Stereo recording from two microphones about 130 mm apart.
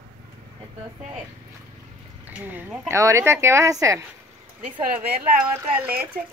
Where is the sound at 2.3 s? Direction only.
15° right (ahead or behind).